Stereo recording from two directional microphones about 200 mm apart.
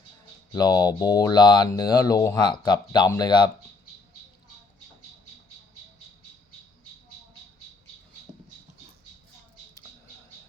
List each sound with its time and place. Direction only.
0.5 s speech: 20° left (ahead or behind)